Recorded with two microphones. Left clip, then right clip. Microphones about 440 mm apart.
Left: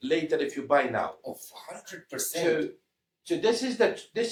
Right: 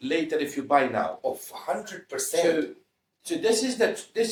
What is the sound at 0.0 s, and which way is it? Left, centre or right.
Speech, centre.